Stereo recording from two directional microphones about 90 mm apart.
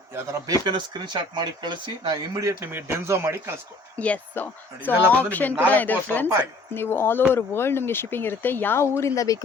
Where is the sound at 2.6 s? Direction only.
25° right (ahead or behind).